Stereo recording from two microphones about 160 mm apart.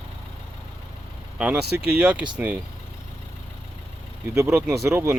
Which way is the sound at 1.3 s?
5° right (ahead or behind).